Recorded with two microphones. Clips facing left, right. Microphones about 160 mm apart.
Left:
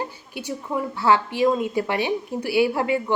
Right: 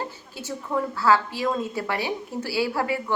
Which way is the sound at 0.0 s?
15° left (ahead or behind).